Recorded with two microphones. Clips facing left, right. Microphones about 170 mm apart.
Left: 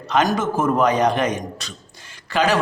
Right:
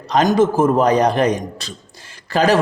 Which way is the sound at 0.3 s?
30° right (ahead or behind).